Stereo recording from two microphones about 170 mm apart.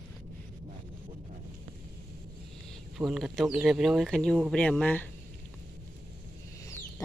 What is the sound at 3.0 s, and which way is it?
Speech, 5° right (ahead or behind).